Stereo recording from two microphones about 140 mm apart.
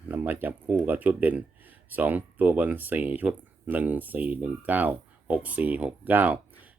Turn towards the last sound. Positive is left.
turn(degrees=-10)  # may be behind; listen again after turning